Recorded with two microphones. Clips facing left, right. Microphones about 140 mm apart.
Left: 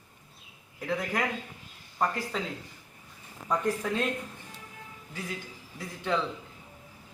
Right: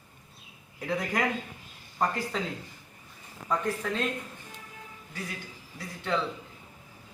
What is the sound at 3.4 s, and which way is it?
Speech, 10° left (ahead or behind).